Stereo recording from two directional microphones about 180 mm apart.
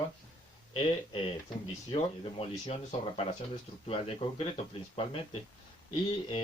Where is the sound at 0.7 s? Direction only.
30° left (ahead or behind).